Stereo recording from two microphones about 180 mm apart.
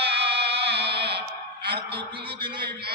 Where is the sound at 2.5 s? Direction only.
60° right (ahead or behind).